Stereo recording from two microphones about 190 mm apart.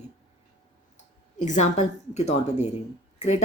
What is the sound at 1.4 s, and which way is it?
Speech, 40° left (ahead or behind).